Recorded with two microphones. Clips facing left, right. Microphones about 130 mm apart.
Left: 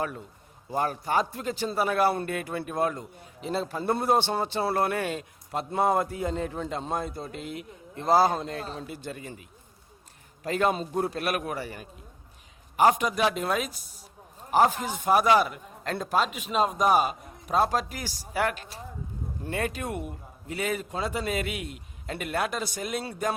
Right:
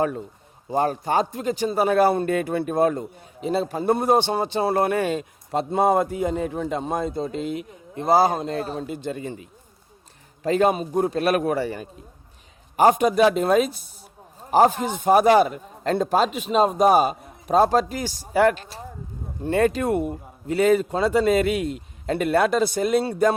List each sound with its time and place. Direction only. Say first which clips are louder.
0.0 s a man's voice: right 8 dB; 30° right (ahead or behind)
3.0 s a man's voice: right 8 dB; 15° right (ahead or behind); by 23.3 s 35° right (ahead or behind)